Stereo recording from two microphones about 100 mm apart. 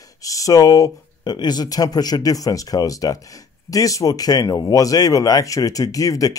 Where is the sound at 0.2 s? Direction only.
35° left (ahead or behind).